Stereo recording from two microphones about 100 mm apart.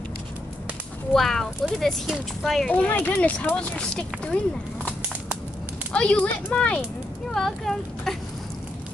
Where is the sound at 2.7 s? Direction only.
15° left (ahead or behind).